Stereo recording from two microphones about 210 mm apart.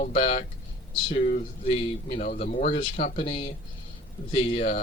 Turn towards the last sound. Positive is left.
turn(degrees=30)  # may be behind; listen again after turning